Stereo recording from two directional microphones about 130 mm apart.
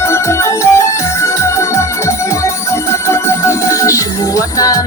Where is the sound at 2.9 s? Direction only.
20° left (ahead or behind).